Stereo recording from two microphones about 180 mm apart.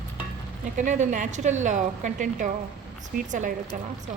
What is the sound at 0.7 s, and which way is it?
A woman's voice, 45° right (ahead or behind).